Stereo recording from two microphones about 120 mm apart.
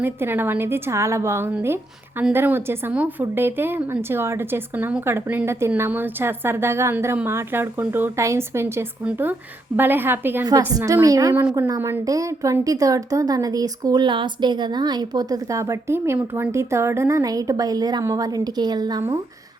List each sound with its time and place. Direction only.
0.0 s a woman's voice: 20° right (ahead or behind)
10.7 s a woman's voice: 30° right (ahead or behind)